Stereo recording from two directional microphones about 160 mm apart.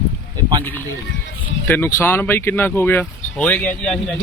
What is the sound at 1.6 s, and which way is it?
Speech, 15° left (ahead or behind).